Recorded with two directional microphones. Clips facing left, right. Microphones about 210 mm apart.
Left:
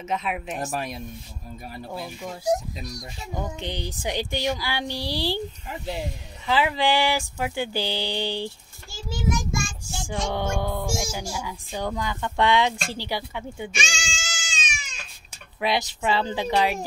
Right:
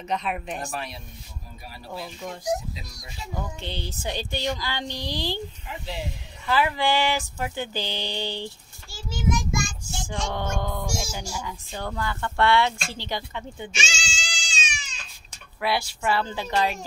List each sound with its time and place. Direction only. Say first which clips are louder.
0.1 s speech: even; 5° left (ahead or behind)
0.7 s speech: left 4 dB; 45° left (ahead or behind)
2.0 s speech: right 2 dB; 5° left (ahead or behind)
3.3 s a woman's voice: left 3 dB; 20° left (ahead or behind)
5.7 s speech: left 2 dB; 45° left (ahead or behind)
6.4 s a woman's voice: left 1 dB; 15° left (ahead or behind)
10.0 s a woman's voice: left 3 dB; 10° left (ahead or behind)
13.7 s goat: left 1 dB; 55° left (ahead or behind)
15.6 s a woman's voice: left 1 dB; 20° left (ahead or behind)